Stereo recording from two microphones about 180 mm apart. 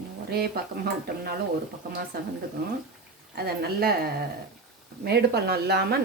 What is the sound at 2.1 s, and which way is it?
Speech, 55° right (ahead or behind).